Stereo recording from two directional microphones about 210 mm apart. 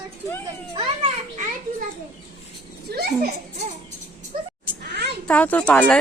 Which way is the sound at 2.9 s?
50° right (ahead or behind).